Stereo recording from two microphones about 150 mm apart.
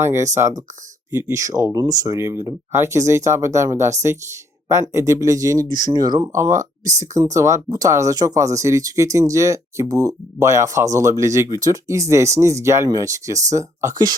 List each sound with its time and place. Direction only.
0.0 s speech: 20° right (ahead or behind)